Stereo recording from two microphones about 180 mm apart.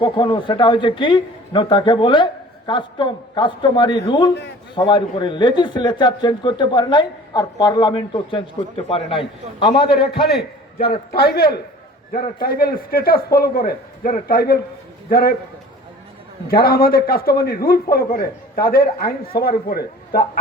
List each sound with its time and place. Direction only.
0.0 s a man's voice: 25° left (ahead or behind)
10.3 s a man's voice: 60° left (ahead or behind)
16.5 s a man's voice: 55° left (ahead or behind)